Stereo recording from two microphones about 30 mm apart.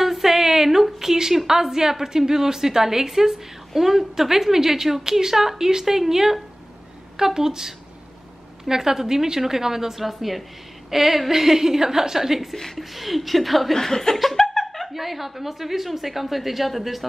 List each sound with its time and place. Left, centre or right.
0.0 s a sound: centre
1.5 s a woman's voice: centre
13.7 s laughter: centre
14.1 s a woman's voice: centre
14.6 s chuckle: centre
15.0 s a woman's voice: centre